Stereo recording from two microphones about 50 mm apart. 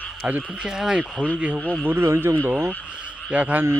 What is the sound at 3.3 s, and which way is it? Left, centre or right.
Speech, right.